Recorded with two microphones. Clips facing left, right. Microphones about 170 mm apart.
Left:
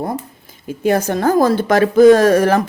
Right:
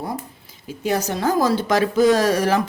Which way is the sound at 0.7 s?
55° left (ahead or behind).